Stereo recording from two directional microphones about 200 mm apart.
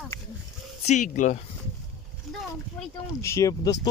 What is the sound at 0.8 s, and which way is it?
Speech, 40° left (ahead or behind).